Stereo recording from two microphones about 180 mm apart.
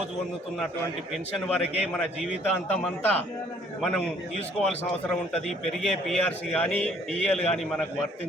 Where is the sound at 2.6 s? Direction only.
10° left (ahead or behind).